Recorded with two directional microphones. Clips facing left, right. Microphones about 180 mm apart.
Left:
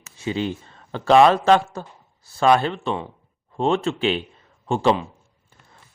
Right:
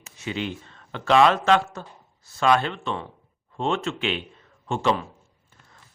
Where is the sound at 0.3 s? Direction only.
35° left (ahead or behind).